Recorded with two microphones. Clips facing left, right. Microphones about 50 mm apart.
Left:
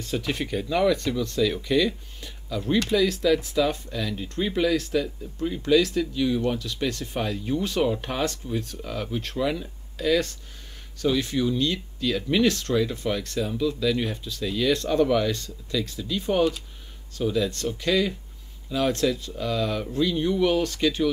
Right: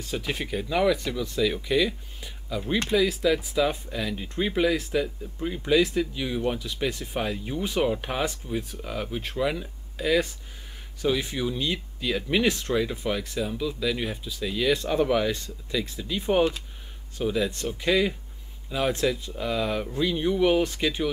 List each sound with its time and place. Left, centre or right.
0.0 s speech: centre